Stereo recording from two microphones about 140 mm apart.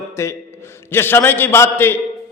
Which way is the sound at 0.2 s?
20° left (ahead or behind).